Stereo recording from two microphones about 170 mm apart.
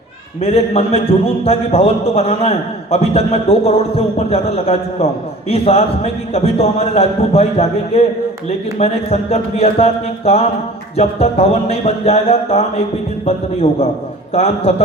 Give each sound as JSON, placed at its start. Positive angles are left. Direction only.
{"t": 0.4, "sound": "a man's voice", "side_deg": 35}